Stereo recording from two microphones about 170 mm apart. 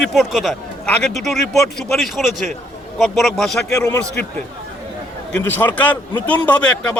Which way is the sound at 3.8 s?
20° left (ahead or behind).